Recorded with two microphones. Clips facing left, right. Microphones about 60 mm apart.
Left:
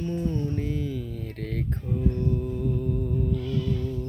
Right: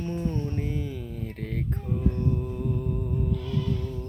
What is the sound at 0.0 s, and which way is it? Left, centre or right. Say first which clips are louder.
Music: left 2 dB; right.